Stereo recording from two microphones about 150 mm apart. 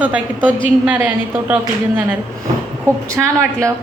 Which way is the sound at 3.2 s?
20° right (ahead or behind).